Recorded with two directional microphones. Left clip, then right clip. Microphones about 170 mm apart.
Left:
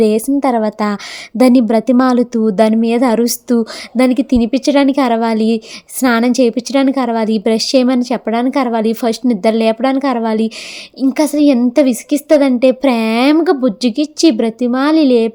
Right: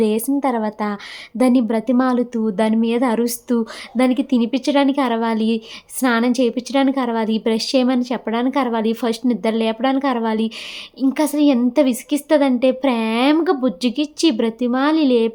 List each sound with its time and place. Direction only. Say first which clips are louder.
0.0 s a woman's voice: left 6 dB; 30° left (ahead or behind)